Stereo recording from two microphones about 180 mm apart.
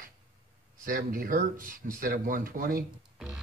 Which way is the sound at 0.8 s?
50° right (ahead or behind).